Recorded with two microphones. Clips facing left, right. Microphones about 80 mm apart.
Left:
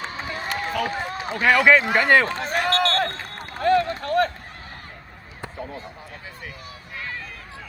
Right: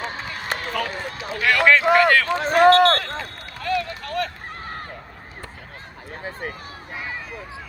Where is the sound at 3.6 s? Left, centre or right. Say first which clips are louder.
Left 6 dB; left.